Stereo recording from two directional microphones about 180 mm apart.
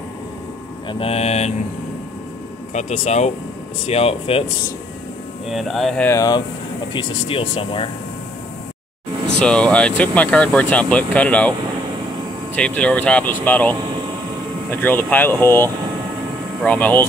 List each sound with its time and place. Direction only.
0.8 s speech: 30° left (ahead or behind)
2.7 s speech: 40° left (ahead or behind)
5.5 s speech: centre (ahead or behind)
6.0 s speech: 20° left (ahead or behind)
6.9 s speech: 30° left (ahead or behind)
9.4 s speech: 5° left (ahead or behind)
12.5 s speech: 5° left (ahead or behind)